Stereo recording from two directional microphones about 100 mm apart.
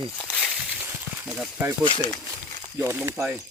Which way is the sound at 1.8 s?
55° left (ahead or behind).